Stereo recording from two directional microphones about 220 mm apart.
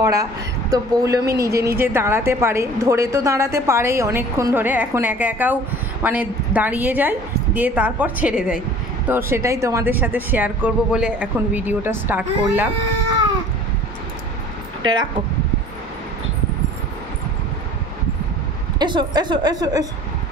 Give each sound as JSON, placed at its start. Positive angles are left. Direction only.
{"t": 0.0, "sound": "a woman's voice", "side_deg": -15}
{"t": 18.8, "sound": "a woman's voice", "side_deg": -20}